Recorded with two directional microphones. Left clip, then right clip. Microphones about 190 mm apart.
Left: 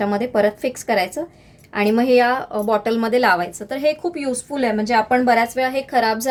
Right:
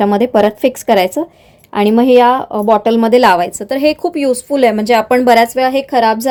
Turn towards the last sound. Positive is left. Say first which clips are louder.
# right 7 dB
turn(degrees=-45)  # may be behind; listen again after turning